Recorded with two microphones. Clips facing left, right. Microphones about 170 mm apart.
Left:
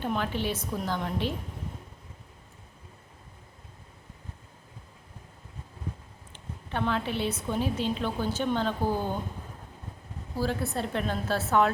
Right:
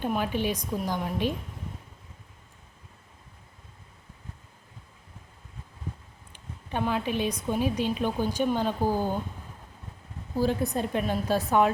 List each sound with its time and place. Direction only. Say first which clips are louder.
0.0 s a woman's voice: right 2 dB; 15° right (ahead or behind)
6.3 s a woman's voice: right 2 dB; 15° right (ahead or behind)
10.3 s a woman's voice: right 4 dB; 15° right (ahead or behind)